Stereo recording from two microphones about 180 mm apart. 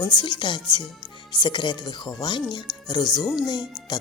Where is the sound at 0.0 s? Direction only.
25° left (ahead or behind).